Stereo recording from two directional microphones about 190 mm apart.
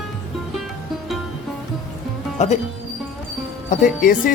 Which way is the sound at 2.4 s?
40° left (ahead or behind).